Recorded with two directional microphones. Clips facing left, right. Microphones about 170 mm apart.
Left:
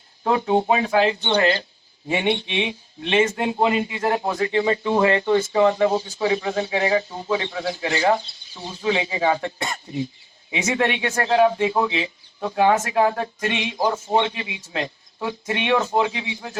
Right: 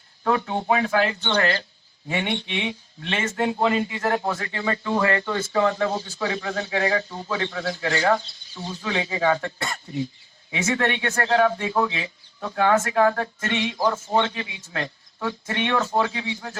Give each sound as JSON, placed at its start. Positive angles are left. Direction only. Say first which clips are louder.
{"t": 0.3, "sound": "speech", "louder": "left 3 dB", "side_deg": 20}